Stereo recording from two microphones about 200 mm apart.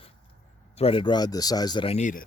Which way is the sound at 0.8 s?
25° left (ahead or behind).